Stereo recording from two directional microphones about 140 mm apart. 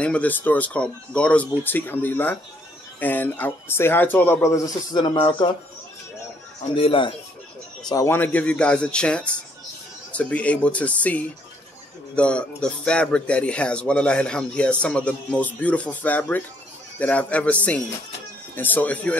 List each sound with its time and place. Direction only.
0.0 s speech: 10° left (ahead or behind); by 5.5 s 35° left (ahead or behind)
6.7 s speech: 40° left (ahead or behind)
7.9 s speech: 20° left (ahead or behind)